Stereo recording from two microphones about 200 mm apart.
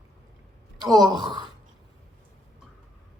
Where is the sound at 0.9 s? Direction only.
20° right (ahead or behind).